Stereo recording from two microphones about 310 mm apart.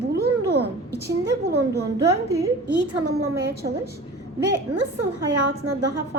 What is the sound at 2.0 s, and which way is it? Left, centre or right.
Speech, centre.